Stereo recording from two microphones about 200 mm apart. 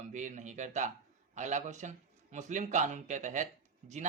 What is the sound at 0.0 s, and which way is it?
Speech, 35° right (ahead or behind).